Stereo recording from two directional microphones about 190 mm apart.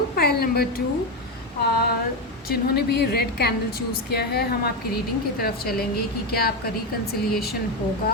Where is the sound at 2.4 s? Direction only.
55° left (ahead or behind).